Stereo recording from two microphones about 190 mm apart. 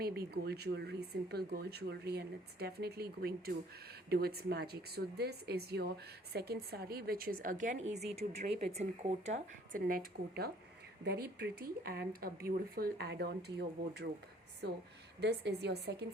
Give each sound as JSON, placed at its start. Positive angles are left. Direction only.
{"t": 0.0, "sound": "a woman's voice", "side_deg": -55}
{"t": 9.8, "sound": "a woman's voice", "side_deg": -50}
{"t": 15.2, "sound": "speech", "side_deg": -60}